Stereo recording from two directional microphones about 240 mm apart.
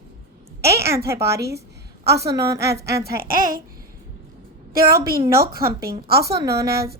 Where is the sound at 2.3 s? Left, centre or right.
Centre.